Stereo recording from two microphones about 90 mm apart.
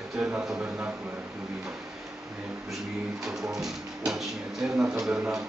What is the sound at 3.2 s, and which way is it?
A man's voice, 5° right (ahead or behind).